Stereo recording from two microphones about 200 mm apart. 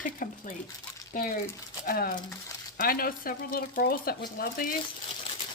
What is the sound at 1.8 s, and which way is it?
A woman's voice, 45° left (ahead or behind).